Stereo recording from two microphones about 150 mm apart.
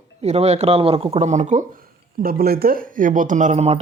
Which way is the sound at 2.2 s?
80° right.